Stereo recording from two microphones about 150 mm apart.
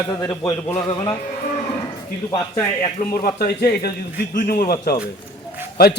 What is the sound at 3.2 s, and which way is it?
Speech, 85° left.